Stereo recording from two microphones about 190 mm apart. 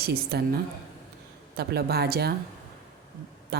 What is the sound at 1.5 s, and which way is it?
Speech, 55° right (ahead or behind).